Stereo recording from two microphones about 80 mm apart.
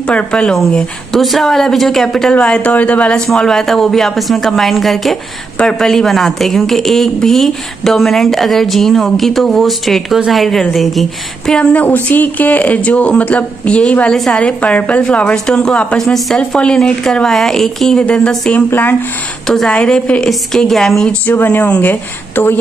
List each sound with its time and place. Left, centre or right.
0.0 s speech: centre
2.3 s speech: centre
11.8 s speech: left; by 14.4 s centre
14.4 s speech: centre
16.0 s speech: centre
18.7 s speech: left
19.4 s speech: centre
21.3 s speech: left
22.3 s speech: left